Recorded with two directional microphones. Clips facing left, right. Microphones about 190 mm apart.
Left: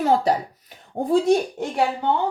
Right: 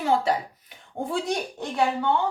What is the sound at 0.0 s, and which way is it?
A woman's voice, 40° left (ahead or behind).